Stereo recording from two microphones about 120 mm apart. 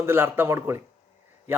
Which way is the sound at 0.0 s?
20° right (ahead or behind).